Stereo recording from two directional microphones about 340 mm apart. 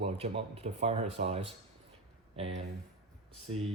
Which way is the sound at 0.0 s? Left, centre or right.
Centre.